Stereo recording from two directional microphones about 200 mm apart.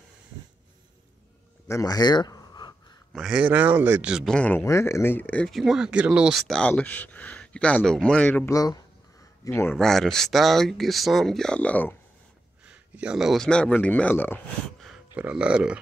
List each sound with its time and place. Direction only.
1.7 s speech: 15° left (ahead or behind)
3.1 s speech: centre (ahead or behind)
12.6 s speech: 5° right (ahead or behind); by 14.9 s 10° left (ahead or behind)
14.9 s speech: 5° right (ahead or behind)